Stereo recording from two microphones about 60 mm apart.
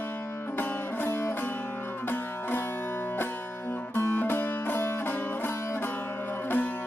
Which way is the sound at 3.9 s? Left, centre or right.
Left.